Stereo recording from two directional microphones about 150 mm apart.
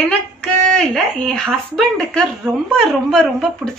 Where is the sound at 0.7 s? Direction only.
5° left (ahead or behind).